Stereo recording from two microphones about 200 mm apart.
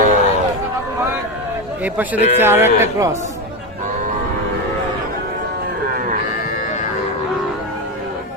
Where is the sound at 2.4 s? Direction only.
10° right (ahead or behind).